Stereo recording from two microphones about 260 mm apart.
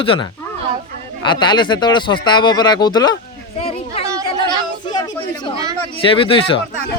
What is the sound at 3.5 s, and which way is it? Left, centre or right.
Children playing, left.